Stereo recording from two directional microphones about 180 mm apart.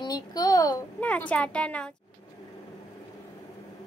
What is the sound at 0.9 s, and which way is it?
Speech, 10° left (ahead or behind).